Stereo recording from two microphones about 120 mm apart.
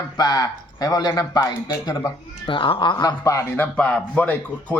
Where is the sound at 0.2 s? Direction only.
35° left (ahead or behind).